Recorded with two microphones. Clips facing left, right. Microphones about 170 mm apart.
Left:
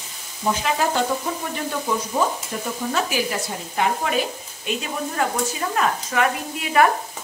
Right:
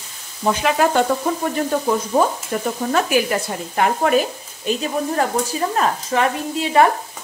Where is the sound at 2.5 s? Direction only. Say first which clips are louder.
Right 5 dB; 60° right (ahead or behind).